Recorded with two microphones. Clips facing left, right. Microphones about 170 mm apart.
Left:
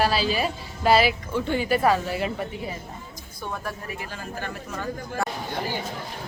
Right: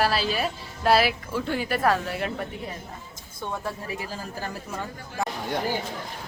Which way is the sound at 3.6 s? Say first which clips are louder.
Right 1 dB; 30° right (ahead or behind).